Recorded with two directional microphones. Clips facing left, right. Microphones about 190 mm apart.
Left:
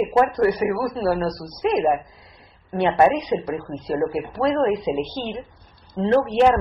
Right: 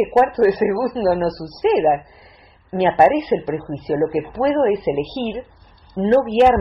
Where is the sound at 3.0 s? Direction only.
25° right (ahead or behind).